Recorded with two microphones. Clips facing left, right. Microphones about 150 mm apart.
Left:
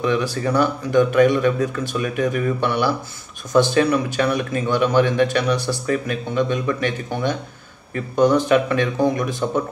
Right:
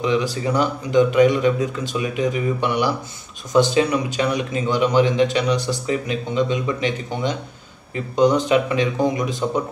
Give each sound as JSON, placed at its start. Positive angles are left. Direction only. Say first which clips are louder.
{"t": 0.0, "sound": "a man's voice", "louder": "even", "side_deg": -15}